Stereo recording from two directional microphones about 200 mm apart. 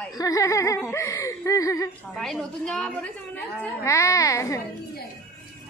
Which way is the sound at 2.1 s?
Centre (ahead or behind).